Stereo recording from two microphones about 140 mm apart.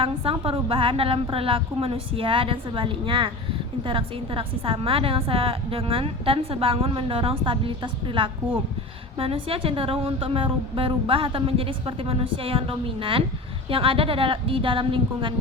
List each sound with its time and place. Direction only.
0.0 s a woman's voice: 40° right (ahead or behind)